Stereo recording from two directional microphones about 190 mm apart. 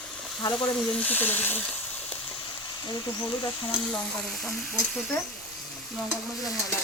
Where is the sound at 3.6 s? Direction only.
5° left (ahead or behind).